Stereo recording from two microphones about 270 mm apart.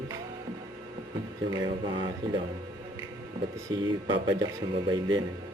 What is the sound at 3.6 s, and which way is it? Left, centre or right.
Speech, centre.